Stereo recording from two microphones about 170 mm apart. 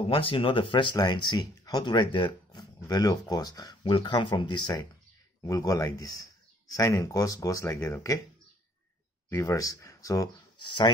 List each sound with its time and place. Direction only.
0.0 s speech: 30° left (ahead or behind); by 8.2 s 15° left (ahead or behind)
9.3 s speech: 15° left (ahead or behind)